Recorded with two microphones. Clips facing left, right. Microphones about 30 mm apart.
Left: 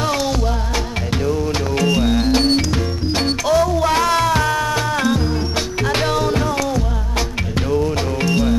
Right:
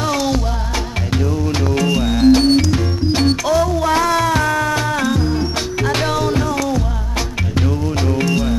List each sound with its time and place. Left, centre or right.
0.0 s music: centre
4.0 s music: left
4.9 s music: centre
7.5 s music: centre